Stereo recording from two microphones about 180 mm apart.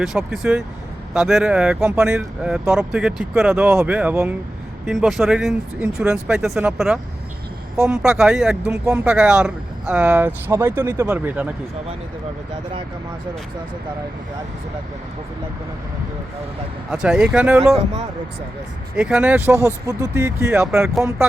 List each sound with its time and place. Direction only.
0.0 s speech: 5° right (ahead or behind)
4.9 s speech: centre (ahead or behind)
16.9 s speech: 5° right (ahead or behind)
18.9 s speech: 5° right (ahead or behind)